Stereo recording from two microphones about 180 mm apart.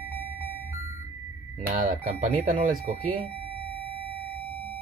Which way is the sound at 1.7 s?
45° right (ahead or behind).